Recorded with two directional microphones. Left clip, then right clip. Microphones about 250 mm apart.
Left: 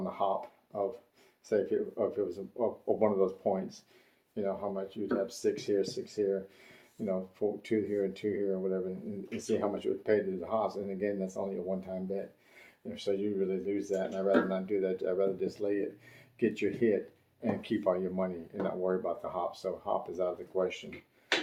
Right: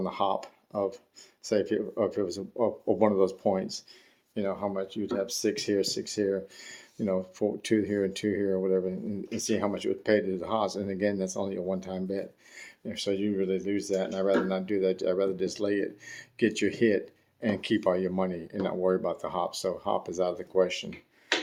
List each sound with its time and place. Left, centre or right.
0.0 s speech: right